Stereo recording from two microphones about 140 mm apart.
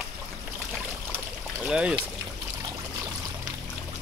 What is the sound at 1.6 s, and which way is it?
Speech, 5° right (ahead or behind).